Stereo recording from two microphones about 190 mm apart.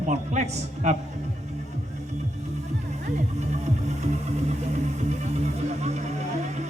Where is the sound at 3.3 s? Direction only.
35° right (ahead or behind).